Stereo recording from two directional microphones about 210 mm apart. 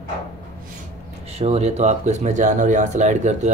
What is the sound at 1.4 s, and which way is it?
Speech, 30° right (ahead or behind).